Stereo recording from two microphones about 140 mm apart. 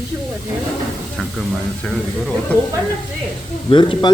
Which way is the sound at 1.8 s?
5° left (ahead or behind).